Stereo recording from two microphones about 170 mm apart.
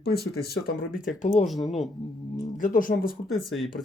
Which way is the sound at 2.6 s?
55° left (ahead or behind).